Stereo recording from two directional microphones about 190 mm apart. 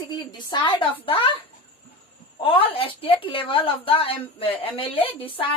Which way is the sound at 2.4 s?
30° left (ahead or behind).